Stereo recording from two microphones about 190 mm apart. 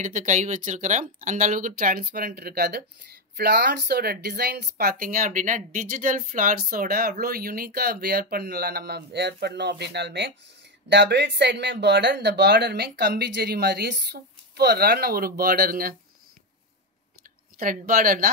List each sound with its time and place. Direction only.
0.0 s speech: 40° right (ahead or behind)
17.6 s speech: 50° right (ahead or behind)